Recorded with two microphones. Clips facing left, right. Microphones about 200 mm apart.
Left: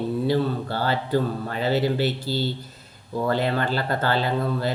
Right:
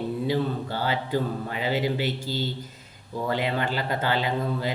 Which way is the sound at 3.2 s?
15° right (ahead or behind).